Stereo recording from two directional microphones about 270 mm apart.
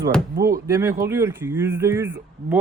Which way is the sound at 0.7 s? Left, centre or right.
Centre.